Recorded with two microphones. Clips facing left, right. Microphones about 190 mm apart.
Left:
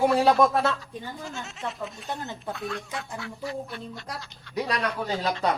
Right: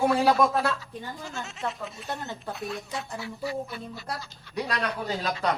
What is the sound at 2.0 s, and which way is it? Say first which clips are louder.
Speech: right 1 dB; 20° left (ahead or behind).